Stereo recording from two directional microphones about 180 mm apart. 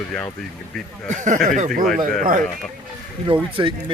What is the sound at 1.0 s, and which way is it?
Speech, 45° right (ahead or behind).